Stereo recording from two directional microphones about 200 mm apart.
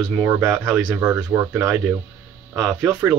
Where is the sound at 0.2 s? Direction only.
10° right (ahead or behind).